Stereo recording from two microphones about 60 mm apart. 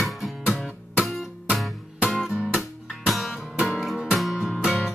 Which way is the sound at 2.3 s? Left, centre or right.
Centre.